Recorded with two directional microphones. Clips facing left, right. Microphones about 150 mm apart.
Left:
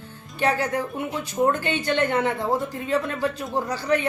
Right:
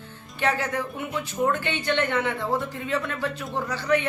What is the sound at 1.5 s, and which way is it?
A woman's voice, 40° left (ahead or behind).